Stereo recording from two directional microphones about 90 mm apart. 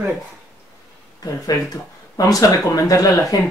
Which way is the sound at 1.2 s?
40° left (ahead or behind).